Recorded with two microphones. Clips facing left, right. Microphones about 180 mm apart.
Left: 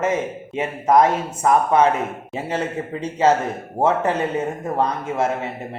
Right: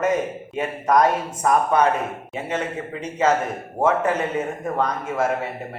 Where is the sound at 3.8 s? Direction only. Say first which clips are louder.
Left 1 dB; 30° left (ahead or behind).